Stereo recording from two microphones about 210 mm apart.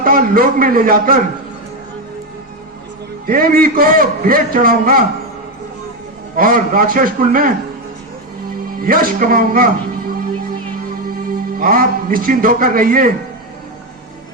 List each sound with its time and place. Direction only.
0.0 s a man's voice: 45° right (ahead or behind)
3.2 s a man's voice: 45° right (ahead or behind)
6.3 s a man's voice: 45° right (ahead or behind)
8.8 s a man's voice: 45° right (ahead or behind)
11.2 s a man's voice: 45° right (ahead or behind)